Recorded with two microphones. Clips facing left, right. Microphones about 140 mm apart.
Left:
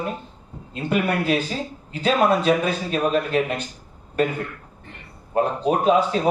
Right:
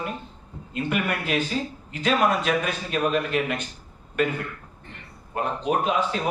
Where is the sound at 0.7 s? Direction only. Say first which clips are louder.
Left 4 dB; 35° left (ahead or behind).